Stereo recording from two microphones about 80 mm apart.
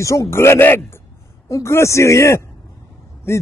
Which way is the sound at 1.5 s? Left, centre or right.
Left.